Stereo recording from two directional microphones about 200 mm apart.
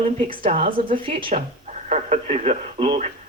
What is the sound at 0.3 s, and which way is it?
Speech, 25° right (ahead or behind).